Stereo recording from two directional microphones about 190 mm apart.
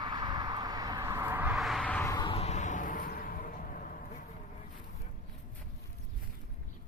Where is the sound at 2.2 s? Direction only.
35° left (ahead or behind).